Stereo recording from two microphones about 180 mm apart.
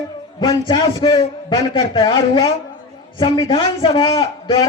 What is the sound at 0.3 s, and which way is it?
A man's voice, 25° left (ahead or behind).